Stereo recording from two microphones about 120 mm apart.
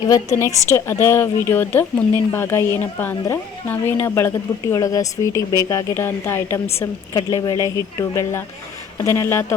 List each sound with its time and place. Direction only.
0.0 s a woman's voice: 30° left (ahead or behind)